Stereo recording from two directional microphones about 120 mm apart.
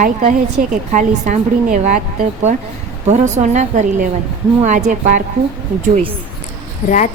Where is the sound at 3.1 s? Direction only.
75° right (ahead or behind); by 5.2 s 90° right.